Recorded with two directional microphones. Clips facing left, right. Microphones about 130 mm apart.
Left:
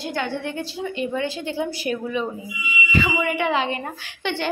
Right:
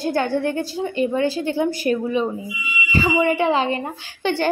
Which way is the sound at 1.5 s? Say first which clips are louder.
Right 5 dB; 45° right (ahead or behind).